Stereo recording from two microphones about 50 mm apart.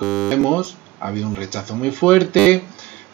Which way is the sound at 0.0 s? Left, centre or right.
Centre.